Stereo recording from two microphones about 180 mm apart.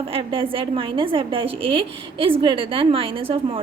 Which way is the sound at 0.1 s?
30° right (ahead or behind).